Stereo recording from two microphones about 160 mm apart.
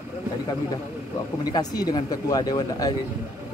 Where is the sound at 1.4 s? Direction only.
25° left (ahead or behind).